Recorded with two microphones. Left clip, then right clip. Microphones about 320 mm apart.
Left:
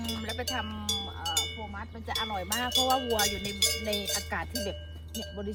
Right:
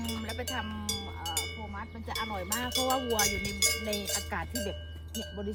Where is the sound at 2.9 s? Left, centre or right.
Centre.